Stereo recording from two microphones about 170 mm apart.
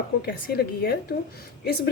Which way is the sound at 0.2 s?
70° left (ahead or behind).